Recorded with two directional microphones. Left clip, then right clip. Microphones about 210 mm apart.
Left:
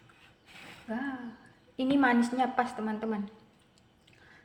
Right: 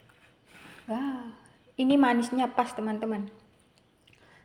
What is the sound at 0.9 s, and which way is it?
A woman's voice, 20° right (ahead or behind).